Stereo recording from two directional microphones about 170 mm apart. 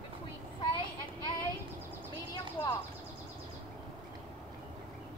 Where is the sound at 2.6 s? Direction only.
25° left (ahead or behind).